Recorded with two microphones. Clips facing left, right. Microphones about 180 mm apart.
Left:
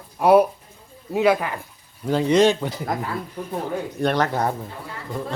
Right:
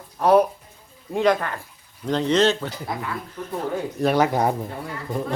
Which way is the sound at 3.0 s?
35° left (ahead or behind).